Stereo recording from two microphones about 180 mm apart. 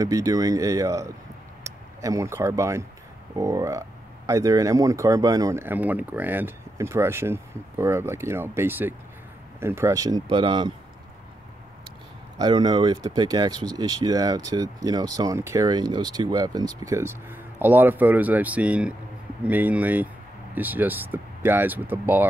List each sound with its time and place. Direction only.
0.0 s speech: 20° right (ahead or behind)
12.4 s speech: 25° right (ahead or behind)